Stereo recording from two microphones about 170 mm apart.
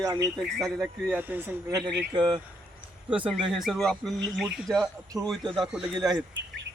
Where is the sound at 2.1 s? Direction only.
25° right (ahead or behind).